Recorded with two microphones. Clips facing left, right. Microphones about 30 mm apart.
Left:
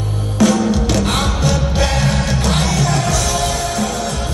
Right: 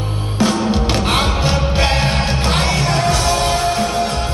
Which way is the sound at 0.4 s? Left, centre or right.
Right.